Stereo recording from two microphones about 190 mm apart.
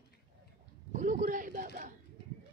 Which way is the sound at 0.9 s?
40° right (ahead or behind).